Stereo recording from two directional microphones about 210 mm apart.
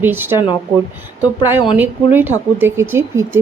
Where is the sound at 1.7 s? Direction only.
10° right (ahead or behind).